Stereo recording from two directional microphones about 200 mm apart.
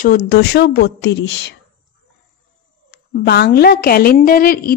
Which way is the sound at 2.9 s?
50° left (ahead or behind).